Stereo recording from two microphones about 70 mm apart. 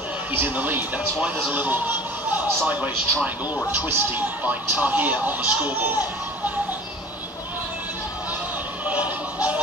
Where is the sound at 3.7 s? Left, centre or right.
Right.